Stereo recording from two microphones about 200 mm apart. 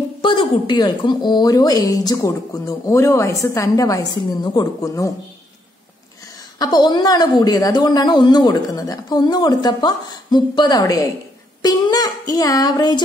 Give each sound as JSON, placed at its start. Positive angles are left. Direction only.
{"t": 0.2, "sound": "a woman's voice", "side_deg": 25}
{"t": 6.6, "sound": "a woman's voice", "side_deg": 20}